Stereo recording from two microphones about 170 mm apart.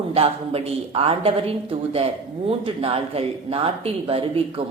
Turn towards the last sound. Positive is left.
turn(degrees=-35)  # may be behind; listen again after turning